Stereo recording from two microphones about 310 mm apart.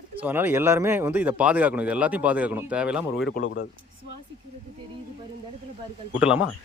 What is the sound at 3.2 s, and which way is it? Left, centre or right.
Speech, left.